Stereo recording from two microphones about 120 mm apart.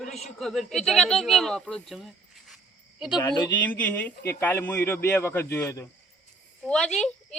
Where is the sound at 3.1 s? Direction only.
35° left (ahead or behind).